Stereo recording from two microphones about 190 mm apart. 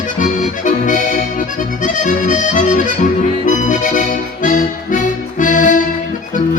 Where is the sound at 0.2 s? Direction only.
40° left (ahead or behind).